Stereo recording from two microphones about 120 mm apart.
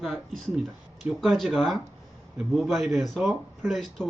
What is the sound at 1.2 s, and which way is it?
Speech, centre (ahead or behind).